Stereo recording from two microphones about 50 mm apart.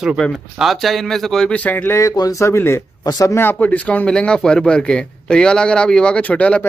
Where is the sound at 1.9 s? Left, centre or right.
Left.